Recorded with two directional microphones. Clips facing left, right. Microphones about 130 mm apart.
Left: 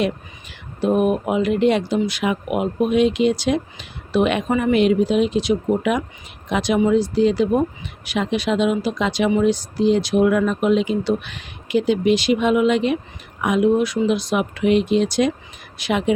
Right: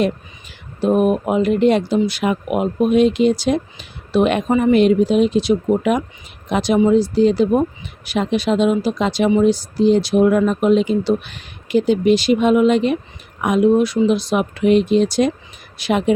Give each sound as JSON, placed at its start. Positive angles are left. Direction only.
{"t": 0.8, "sound": "speech", "side_deg": -35}